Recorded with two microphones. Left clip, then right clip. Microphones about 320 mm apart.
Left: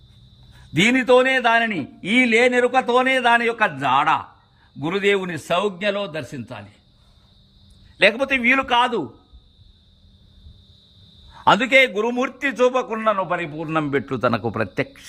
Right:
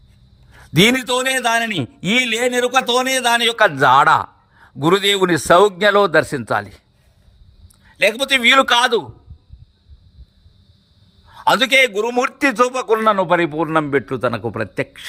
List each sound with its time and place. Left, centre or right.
0.8 s a man's voice: right
1.0 s a man's voice: centre
1.7 s a man's voice: right
2.3 s a man's voice: centre
3.8 s a man's voice: centre
7.9 s a man's voice: centre
11.3 s a man's voice: centre
13.6 s a man's voice: centre